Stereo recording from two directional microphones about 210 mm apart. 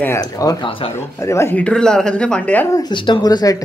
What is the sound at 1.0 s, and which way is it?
Speech, 15° left (ahead or behind).